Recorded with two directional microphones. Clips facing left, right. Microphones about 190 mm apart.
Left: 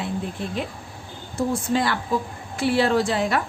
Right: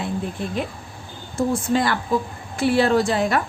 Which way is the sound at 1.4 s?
50° right (ahead or behind).